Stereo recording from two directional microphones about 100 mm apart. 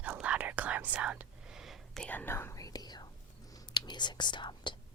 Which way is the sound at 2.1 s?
20° left (ahead or behind).